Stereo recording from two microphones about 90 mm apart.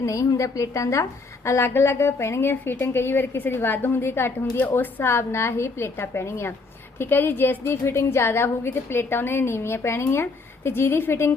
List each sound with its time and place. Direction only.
0.0 s a woman's voice: 35° left (ahead or behind)